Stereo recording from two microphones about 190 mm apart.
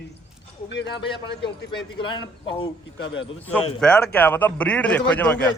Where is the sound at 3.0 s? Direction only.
75° left (ahead or behind).